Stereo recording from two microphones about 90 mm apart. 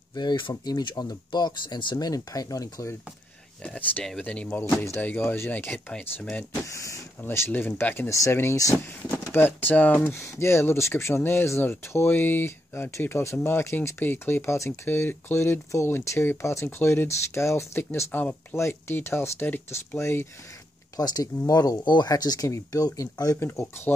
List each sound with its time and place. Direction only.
0.1 s speech: 50° left (ahead or behind)
3.6 s speech: 15° left (ahead or behind)
6.6 s speech: 35° left (ahead or behind)
7.2 s speech: 25° left (ahead or behind)
8.1 s speech: 30° left (ahead or behind)
9.3 s speech: 20° left (ahead or behind)
20.9 s speech: 45° left (ahead or behind)
23.4 s speech: 30° left (ahead or behind)